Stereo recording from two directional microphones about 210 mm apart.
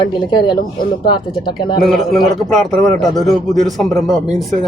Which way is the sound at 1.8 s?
Centre (ahead or behind).